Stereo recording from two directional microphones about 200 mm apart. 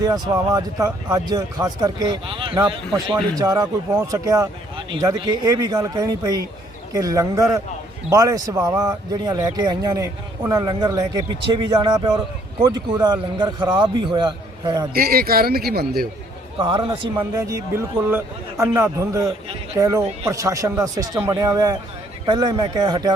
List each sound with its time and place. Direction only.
0.0 s speech: 20° right (ahead or behind)
14.9 s speech: 50° right (ahead or behind)
16.6 s speech: 25° right (ahead or behind)